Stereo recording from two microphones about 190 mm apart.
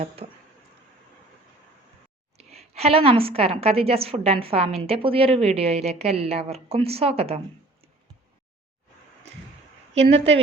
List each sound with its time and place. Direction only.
0.2 s a sound: 35° right (ahead or behind)
2.4 s a woman's voice: 35° right (ahead or behind)
9.9 s a woman's voice: 35° right (ahead or behind)